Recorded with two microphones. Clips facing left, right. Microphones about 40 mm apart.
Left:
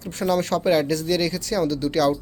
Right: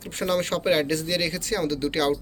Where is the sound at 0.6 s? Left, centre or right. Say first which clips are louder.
Left 3 dB; right.